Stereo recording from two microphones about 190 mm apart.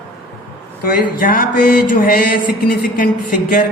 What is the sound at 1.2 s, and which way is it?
A man's voice, 50° left (ahead or behind).